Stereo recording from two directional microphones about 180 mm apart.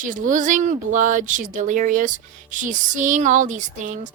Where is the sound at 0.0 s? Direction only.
45° right (ahead or behind).